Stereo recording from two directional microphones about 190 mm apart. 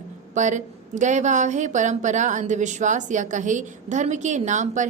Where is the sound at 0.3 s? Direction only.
40° right (ahead or behind).